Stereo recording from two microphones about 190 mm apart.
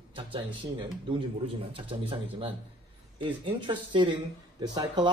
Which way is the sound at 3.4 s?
25° right (ahead or behind).